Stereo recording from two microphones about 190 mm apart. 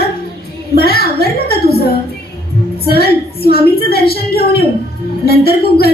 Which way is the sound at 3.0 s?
55° left (ahead or behind).